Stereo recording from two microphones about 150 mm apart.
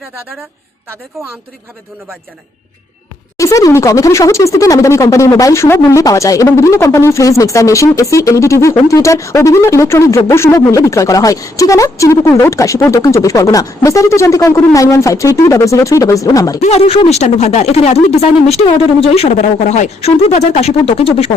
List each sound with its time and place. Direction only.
3.3 s speech: 20° left (ahead or behind)
16.6 s speech: 45° left (ahead or behind)